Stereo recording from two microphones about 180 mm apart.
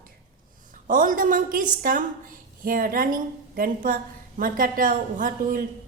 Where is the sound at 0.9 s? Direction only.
50° right (ahead or behind).